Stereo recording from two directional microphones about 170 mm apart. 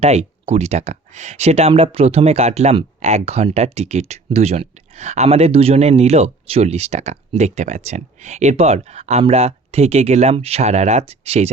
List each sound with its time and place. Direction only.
0.0 s speech: 40° right (ahead or behind)